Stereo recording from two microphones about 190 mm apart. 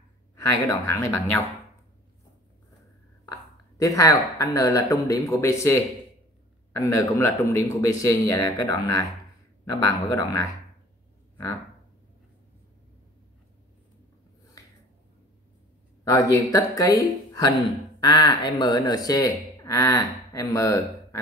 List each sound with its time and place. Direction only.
0.7 s speech: 15° left (ahead or behind)
3.3 s speech: 15° left (ahead or behind)
16.0 s speech: 20° left (ahead or behind)